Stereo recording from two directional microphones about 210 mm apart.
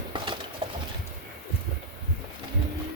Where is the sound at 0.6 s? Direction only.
25° right (ahead or behind).